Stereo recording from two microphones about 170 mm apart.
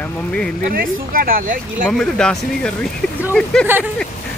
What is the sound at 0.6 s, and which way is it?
Speech, 55° right (ahead or behind).